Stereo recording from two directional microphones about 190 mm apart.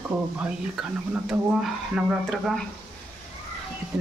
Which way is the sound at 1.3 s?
5° right (ahead or behind).